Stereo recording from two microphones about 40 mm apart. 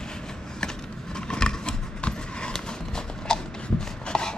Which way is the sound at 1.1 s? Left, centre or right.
Centre.